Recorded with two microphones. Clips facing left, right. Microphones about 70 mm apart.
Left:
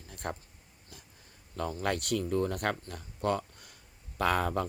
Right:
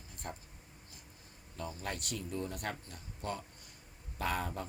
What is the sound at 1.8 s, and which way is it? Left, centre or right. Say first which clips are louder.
Speech: left 12 dB; left.